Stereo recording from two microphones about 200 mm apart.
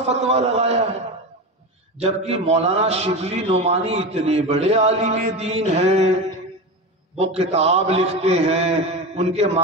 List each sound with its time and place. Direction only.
0.1 s a sound: 30° right (ahead or behind)
2.0 s a man's voice: 30° right (ahead or behind)
7.2 s a man's voice: 30° right (ahead or behind)